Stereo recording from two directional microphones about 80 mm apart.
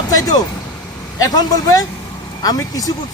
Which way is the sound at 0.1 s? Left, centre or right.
Left.